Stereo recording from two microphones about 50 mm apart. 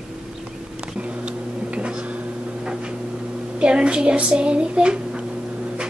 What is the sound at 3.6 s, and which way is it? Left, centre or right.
A child's voice, centre.